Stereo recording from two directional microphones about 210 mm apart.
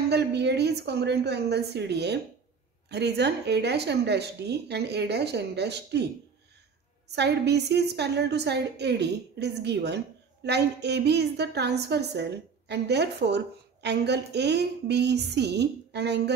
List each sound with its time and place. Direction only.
0.1 s a woman's voice: 55° right (ahead or behind)
7.1 s a woman's voice: 50° right (ahead or behind)